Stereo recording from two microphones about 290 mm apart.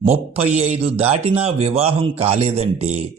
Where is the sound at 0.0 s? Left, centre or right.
Right.